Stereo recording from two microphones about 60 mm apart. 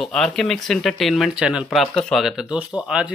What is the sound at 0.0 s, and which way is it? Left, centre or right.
Speech, centre.